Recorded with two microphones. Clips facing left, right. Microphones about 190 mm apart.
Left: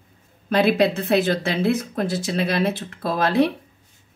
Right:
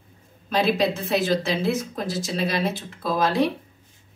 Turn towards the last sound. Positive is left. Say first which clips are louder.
# left 2 dB
turn(degrees=60)  # may be behind; listen again after turning